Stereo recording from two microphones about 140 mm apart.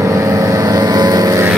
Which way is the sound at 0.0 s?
20° right (ahead or behind).